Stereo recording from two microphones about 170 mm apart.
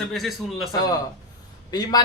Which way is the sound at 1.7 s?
25° left (ahead or behind).